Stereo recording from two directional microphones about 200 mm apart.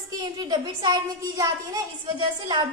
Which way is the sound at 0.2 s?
20° right (ahead or behind).